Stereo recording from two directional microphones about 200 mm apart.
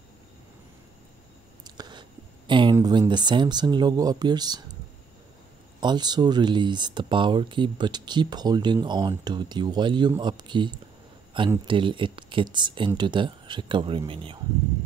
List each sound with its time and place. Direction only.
1.6 s a sound: 20° right (ahead or behind)
2.7 s speech: 20° right (ahead or behind)
5.8 s speech: 20° right (ahead or behind)